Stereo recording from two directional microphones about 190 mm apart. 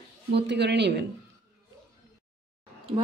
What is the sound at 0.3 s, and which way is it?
Speech, 65° right (ahead or behind).